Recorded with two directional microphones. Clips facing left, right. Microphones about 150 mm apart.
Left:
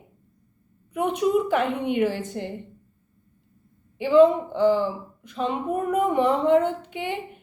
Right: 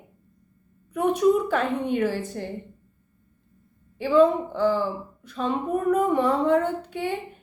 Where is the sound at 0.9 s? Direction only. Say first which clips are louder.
Right 2 dB; 15° left (ahead or behind).